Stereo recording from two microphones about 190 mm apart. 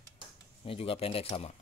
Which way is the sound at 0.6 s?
30° left (ahead or behind).